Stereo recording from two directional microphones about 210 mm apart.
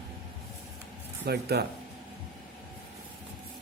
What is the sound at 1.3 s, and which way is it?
Speech, 50° right (ahead or behind).